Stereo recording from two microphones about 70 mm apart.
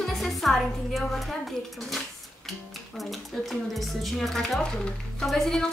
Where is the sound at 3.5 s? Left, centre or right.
Centre.